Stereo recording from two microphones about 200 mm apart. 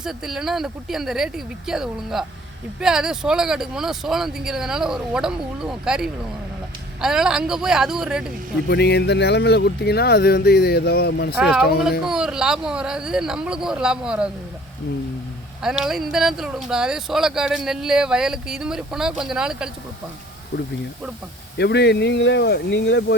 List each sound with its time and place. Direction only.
0.0 s speech: centre (ahead or behind)
8.6 s speech: 55° left (ahead or behind)
11.3 s speech: 5° right (ahead or behind)
15.6 s speech: centre (ahead or behind)
21.6 s speech: 55° left (ahead or behind)